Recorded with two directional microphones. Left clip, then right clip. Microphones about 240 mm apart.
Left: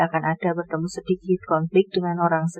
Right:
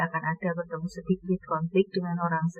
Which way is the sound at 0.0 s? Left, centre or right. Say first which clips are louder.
Left 7 dB; left.